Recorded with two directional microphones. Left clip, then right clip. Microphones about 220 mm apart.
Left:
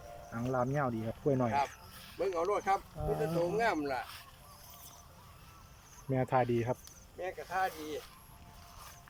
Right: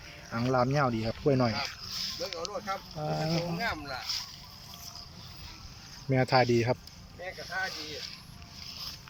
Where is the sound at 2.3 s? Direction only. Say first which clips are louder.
Left 9 dB; 20° left (ahead or behind).